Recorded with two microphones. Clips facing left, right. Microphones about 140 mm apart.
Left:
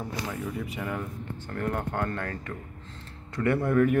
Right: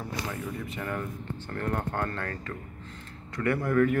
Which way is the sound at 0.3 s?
10° left (ahead or behind).